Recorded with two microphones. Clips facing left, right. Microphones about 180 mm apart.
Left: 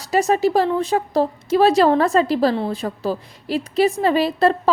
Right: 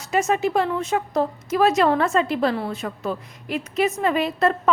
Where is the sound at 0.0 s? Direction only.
35° left (ahead or behind).